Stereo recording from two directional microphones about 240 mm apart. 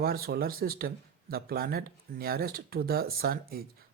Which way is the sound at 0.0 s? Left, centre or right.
Right.